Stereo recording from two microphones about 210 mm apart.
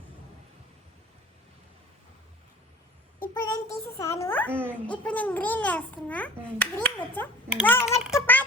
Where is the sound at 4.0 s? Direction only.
15° left (ahead or behind).